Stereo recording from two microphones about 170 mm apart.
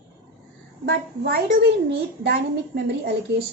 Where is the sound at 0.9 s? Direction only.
70° right (ahead or behind).